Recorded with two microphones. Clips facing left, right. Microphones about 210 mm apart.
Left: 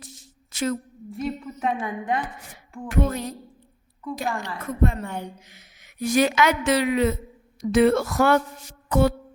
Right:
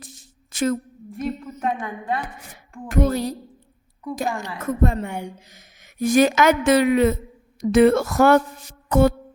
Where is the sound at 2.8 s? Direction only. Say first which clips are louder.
Right 4 dB; 40° right (ahead or behind).